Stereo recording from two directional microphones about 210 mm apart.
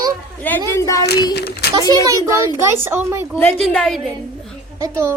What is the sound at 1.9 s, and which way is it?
A child's voice, 15° right (ahead or behind).